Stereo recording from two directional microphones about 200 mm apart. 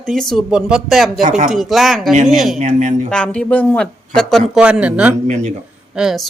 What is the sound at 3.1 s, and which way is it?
Speech, 5° left (ahead or behind).